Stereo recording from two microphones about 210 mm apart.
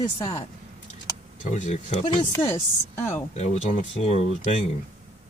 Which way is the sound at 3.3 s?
30° left (ahead or behind).